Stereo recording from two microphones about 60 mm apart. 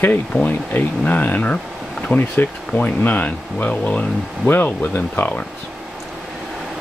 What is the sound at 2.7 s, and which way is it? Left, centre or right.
Speech, left.